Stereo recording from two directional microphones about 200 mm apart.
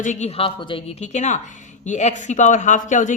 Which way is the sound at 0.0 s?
35° left (ahead or behind).